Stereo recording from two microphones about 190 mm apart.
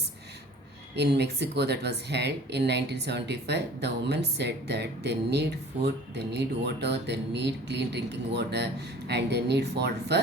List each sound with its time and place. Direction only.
0.9 s speech: 60° right (ahead or behind)